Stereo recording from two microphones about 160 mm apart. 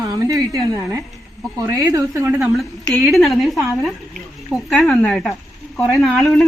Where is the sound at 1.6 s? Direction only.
20° right (ahead or behind).